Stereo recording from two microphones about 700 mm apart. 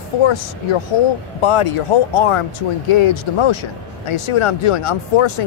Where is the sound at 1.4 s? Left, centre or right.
Left.